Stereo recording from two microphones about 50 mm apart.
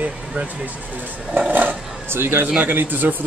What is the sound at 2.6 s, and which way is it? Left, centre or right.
Speech, right.